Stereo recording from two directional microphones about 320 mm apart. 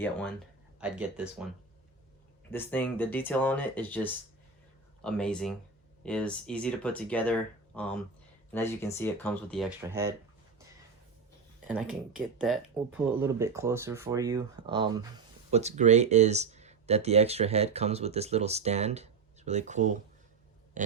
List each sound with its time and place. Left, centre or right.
0.0 s speech: centre
2.5 s speech: centre
11.7 s speech: centre; by 20.0 s right
20.8 s a sound: right